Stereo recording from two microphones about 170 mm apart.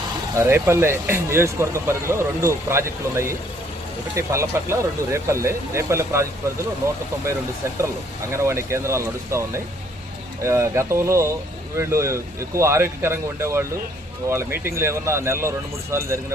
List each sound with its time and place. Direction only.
0.4 s speech: 15° right (ahead or behind)
10.4 s speech: 15° right (ahead or behind)